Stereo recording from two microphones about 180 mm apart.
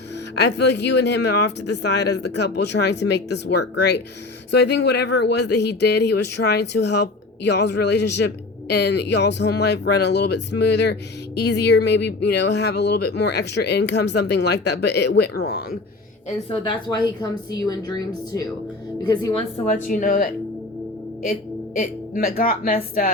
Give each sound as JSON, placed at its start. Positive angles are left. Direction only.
{"t": 0.3, "sound": "speech", "side_deg": 70}
{"t": 16.5, "sound": "a woman's voice", "side_deg": 25}
{"t": 19.6, "sound": "a woman's voice", "side_deg": 45}
{"t": 21.8, "sound": "a woman's voice", "side_deg": 55}